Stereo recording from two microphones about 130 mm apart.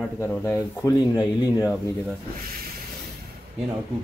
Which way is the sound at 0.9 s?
30° left (ahead or behind).